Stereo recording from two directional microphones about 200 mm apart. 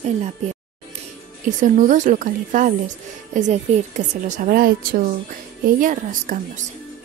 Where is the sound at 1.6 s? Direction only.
40° right (ahead or behind).